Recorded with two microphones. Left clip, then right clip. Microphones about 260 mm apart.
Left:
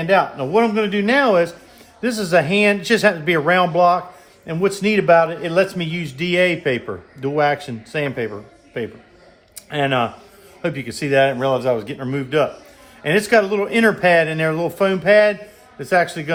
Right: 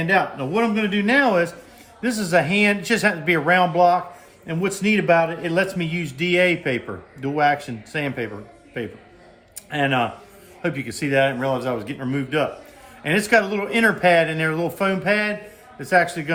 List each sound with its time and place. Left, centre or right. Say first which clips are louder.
0.2 s a man's voice: left 5 dB; left